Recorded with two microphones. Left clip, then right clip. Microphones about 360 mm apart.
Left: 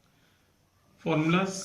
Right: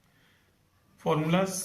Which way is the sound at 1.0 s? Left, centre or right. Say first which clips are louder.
Even; centre.